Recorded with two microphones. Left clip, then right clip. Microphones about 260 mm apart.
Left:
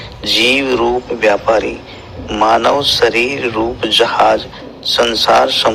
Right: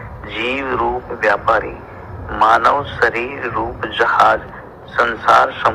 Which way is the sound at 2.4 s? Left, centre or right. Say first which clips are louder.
Left 1 dB; left.